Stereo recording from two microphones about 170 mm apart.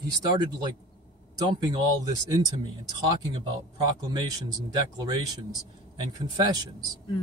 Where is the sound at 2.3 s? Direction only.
25° right (ahead or behind).